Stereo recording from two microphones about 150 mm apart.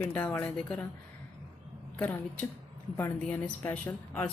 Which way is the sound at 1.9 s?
10° left (ahead or behind).